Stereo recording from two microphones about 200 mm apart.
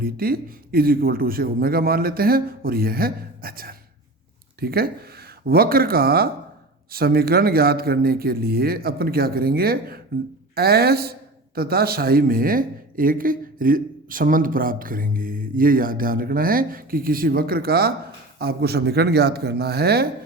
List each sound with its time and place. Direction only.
0.0 s a woman's voice: 50° right (ahead or behind)